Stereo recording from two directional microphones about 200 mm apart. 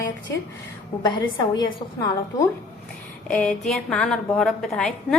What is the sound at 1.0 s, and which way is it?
A woman's voice, 20° left (ahead or behind).